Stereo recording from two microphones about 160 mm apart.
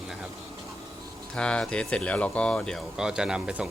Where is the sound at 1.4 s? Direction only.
5° left (ahead or behind).